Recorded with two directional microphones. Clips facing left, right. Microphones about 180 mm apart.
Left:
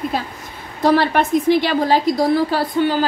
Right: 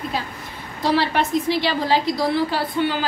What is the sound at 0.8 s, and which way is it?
A woman's voice, 50° left (ahead or behind).